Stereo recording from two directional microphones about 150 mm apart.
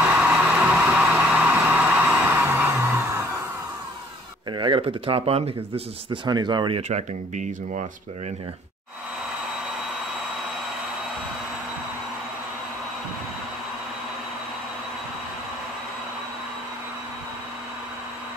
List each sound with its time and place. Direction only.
0.0 s a sound: 10° right (ahead or behind)
2.0 s music: 10° right (ahead or behind)
4.5 s speech: 30° right (ahead or behind)
6.0 s speech: 30° right (ahead or behind)
6.9 s speech: 50° right (ahead or behind)